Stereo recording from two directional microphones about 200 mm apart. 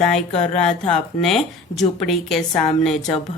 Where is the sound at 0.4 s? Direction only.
5° left (ahead or behind).